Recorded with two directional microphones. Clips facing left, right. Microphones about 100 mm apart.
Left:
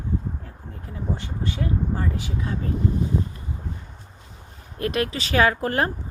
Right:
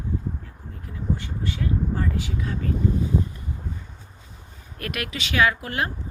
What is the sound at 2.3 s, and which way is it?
Speech, 20° left (ahead or behind).